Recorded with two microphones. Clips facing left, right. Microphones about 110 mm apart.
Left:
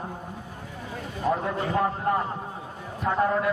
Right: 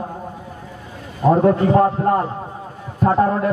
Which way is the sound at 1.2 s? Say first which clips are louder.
Right 12 dB; 45° right (ahead or behind).